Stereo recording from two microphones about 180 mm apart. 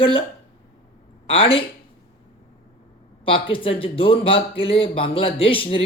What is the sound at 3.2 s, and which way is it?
Speech, 30° left (ahead or behind).